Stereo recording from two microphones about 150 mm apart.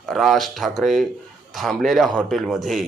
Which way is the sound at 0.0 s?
Centre (ahead or behind).